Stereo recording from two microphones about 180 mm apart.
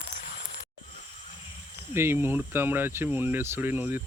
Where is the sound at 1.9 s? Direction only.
15° right (ahead or behind).